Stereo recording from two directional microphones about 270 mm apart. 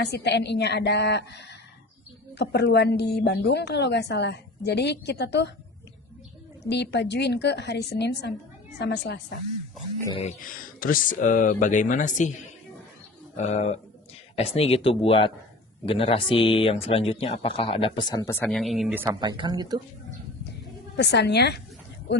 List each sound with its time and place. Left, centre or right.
0.0 s a woman's voice: left
6.7 s a woman's voice: left
10.0 s speech: centre
13.3 s speech: left; by 19.8 s centre
20.9 s a woman's voice: left